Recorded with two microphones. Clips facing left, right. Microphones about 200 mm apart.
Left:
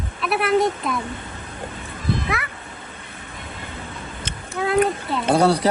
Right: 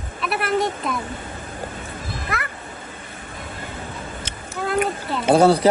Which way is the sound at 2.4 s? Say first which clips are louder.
Right 1 dB; centre (ahead or behind).